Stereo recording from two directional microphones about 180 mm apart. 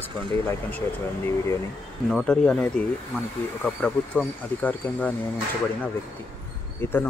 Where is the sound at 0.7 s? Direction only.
10° left (ahead or behind).